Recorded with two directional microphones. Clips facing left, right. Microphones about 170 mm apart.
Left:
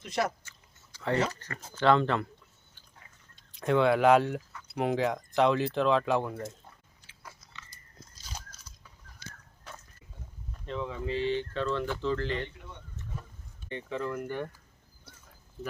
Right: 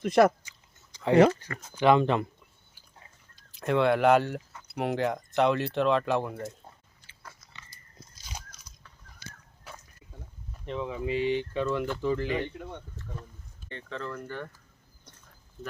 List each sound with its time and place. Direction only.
0.0 s speech: 55° right (ahead or behind)
0.9 s a sound: 20° right (ahead or behind)
1.7 s speech: 15° right (ahead or behind)
3.5 s speech: centre (ahead or behind)
7.0 s biting: 5° left (ahead or behind)
8.3 s a sound: 15° right (ahead or behind)
10.7 s speech: 15° right (ahead or behind)
13.7 s speech: 15° left (ahead or behind)
15.1 s a sound: 5° left (ahead or behind)